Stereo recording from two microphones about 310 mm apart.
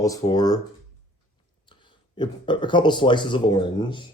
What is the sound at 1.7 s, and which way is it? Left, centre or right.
Speech, centre.